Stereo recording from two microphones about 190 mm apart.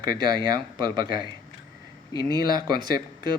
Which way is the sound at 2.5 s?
20° right (ahead or behind).